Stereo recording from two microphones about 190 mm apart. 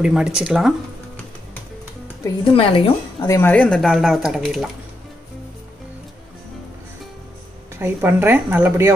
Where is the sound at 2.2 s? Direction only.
25° left (ahead or behind).